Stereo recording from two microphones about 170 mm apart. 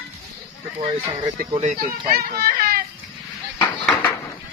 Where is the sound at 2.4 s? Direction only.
60° right (ahead or behind).